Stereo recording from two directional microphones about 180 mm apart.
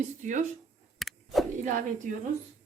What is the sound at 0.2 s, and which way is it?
Speech, 45° right (ahead or behind).